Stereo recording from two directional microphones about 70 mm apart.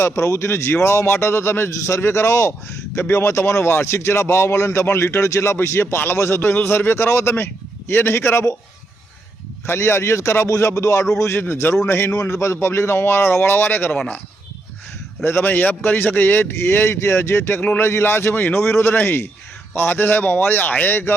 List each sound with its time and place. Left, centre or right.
0.0 s a man's voice: left
9.6 s a man's voice: left
15.2 s a man's voice: left